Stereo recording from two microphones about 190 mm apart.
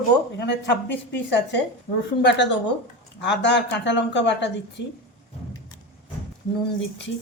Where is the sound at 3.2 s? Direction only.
65° left (ahead or behind).